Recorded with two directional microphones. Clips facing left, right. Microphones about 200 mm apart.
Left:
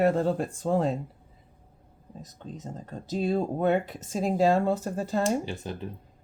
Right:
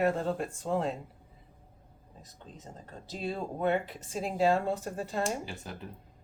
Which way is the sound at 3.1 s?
45° left (ahead or behind).